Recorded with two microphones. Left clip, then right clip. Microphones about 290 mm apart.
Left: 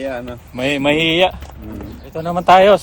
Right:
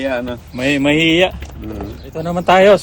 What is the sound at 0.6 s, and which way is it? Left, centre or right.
Speech, centre.